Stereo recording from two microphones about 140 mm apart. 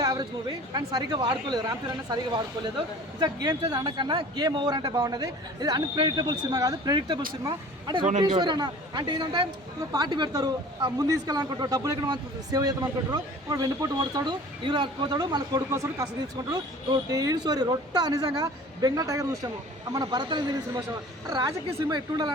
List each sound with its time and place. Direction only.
0.0 s speech: 25° right (ahead or behind)
21.8 s speech: 30° right (ahead or behind)